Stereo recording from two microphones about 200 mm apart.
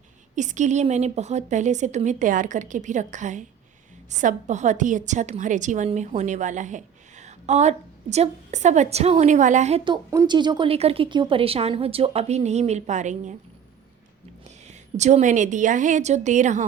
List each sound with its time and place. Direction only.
0.3 s a woman's voice: 35° right (ahead or behind)
14.4 s a woman's voice: 35° right (ahead or behind)